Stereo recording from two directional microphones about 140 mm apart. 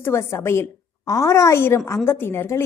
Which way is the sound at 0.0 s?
20° left (ahead or behind).